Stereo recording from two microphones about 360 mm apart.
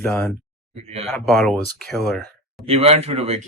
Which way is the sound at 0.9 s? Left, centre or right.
Centre.